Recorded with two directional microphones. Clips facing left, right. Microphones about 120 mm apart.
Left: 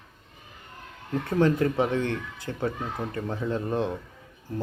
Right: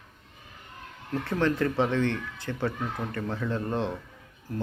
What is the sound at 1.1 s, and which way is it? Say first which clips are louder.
Speech: left 3 dB; 25° left (ahead or behind).